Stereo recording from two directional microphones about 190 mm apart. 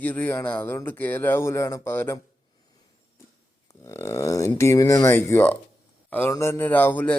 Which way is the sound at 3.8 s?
15° left (ahead or behind).